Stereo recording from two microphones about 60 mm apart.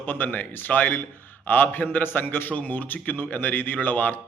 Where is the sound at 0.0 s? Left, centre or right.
Left.